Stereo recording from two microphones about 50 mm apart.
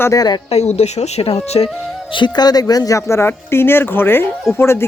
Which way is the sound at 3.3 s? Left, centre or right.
Left.